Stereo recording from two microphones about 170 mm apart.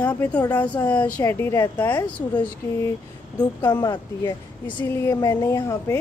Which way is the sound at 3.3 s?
25° left (ahead or behind).